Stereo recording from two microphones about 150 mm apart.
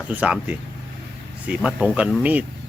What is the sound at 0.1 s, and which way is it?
Speech, 10° right (ahead or behind).